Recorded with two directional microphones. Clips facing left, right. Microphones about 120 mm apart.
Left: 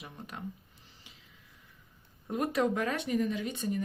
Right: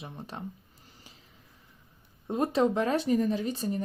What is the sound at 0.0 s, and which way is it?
Speech, 30° right (ahead or behind).